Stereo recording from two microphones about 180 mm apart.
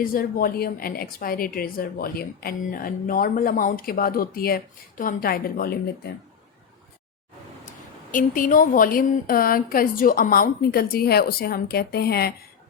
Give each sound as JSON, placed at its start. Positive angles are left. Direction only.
{"t": 0.0, "sound": "a woman's voice", "side_deg": 55}
{"t": 8.1, "sound": "a woman's voice", "side_deg": 50}